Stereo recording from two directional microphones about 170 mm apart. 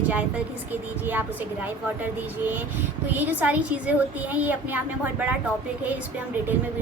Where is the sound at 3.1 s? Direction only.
10° right (ahead or behind).